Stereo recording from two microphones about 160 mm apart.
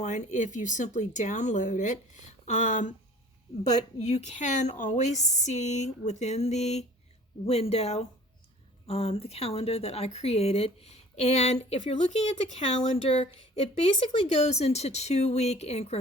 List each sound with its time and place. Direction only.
0.0 s a woman's voice: 50° left (ahead or behind)